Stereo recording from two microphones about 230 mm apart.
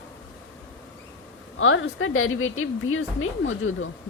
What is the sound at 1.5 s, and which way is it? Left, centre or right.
A woman's voice, left.